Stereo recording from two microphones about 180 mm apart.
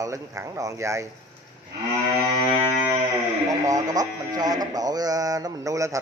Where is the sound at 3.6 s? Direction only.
20° right (ahead or behind).